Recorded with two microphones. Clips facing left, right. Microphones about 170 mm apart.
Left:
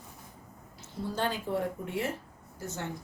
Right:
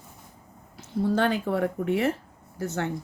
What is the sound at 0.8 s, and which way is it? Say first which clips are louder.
Speech: right 9 dB; 65° right (ahead or behind).